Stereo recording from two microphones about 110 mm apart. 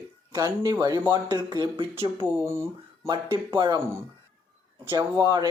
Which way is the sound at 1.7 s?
55° right (ahead or behind).